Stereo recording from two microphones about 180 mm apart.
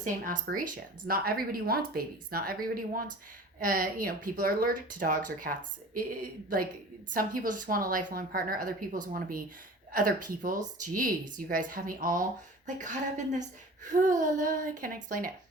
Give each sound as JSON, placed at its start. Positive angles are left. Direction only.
{"t": 0.4, "sound": "speech", "side_deg": -50}
{"t": 7.1, "sound": "speech", "side_deg": -50}